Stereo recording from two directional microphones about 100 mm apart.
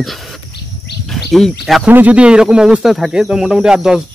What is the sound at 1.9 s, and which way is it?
Speech, 15° right (ahead or behind).